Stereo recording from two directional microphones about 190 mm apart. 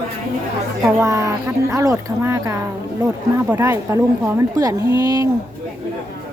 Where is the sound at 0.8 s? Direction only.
15° right (ahead or behind).